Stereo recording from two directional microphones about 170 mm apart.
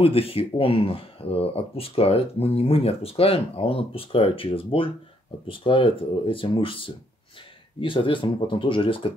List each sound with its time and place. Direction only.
0.0 s speech: 35° left (ahead or behind)